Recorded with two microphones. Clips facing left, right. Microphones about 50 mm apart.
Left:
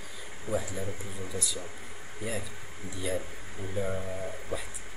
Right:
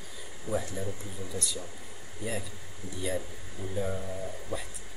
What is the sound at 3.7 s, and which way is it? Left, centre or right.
Speech, centre.